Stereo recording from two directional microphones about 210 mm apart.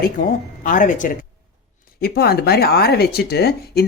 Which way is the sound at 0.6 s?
40° left (ahead or behind).